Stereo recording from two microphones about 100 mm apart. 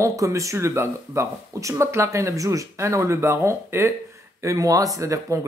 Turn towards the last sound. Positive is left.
turn(degrees=-30)  # may be behind; listen again after turning